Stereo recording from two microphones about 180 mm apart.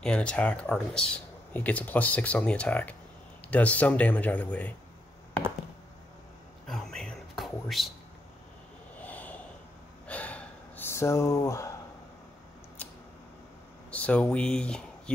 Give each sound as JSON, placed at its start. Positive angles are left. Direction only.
{"t": 0.0, "sound": "speech", "side_deg": 5}
{"t": 6.7, "sound": "whispering", "side_deg": 5}
{"t": 9.0, "sound": "snort", "side_deg": 10}
{"t": 10.0, "sound": "a sound", "side_deg": 10}
{"t": 12.8, "sound": "scissors", "side_deg": 10}
{"t": 13.8, "sound": "speech", "side_deg": 5}